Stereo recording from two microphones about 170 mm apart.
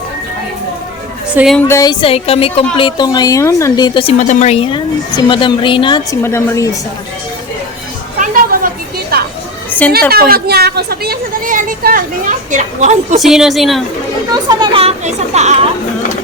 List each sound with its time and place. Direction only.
1.5 s speech: 15° left (ahead or behind)
4.2 s speech: 45° left (ahead or behind); by 6.1 s 30° left (ahead or behind)
6.2 s a woman's voice: 15° left (ahead or behind)
8.2 s a sound: 55° right (ahead or behind)
9.6 s a sound: 10° left (ahead or behind)
10.1 s a woman's voice: 60° right (ahead or behind); by 13.1 s 45° right (ahead or behind)
13.1 s a woman's voice: centre (ahead or behind)
14.4 s speech: 30° right (ahead or behind)